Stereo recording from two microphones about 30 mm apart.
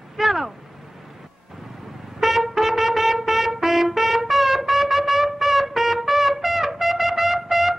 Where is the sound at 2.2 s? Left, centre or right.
Centre.